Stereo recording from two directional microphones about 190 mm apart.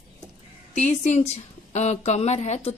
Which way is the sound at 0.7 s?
35° left (ahead or behind).